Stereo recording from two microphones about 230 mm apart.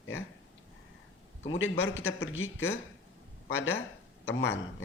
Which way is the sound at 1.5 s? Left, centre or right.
Left.